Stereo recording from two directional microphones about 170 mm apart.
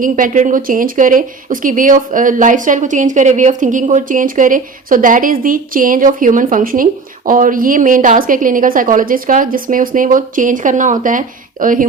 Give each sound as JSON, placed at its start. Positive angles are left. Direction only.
{"t": 0.0, "sound": "speech", "side_deg": -50}